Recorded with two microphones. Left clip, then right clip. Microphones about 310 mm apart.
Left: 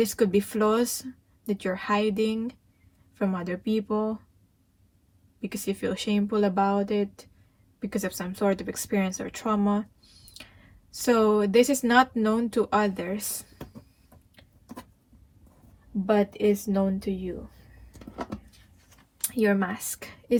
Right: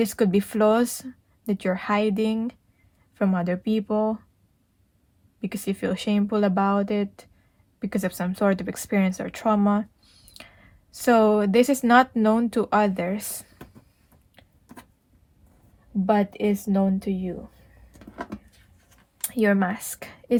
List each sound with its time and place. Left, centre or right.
0.0 s speech: right
5.4 s speech: right
10.9 s speech: right
16.0 s speech: right
19.3 s speech: right